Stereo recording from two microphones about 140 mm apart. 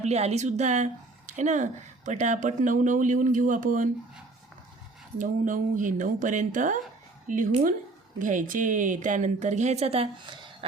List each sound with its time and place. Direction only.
0.0 s speech: 50° right (ahead or behind); by 3.8 s 65° right (ahead or behind)
5.1 s a woman's voice: 70° right (ahead or behind); by 10.7 s 35° right (ahead or behind)